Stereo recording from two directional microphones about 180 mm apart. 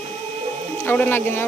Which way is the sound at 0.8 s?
10° left (ahead or behind).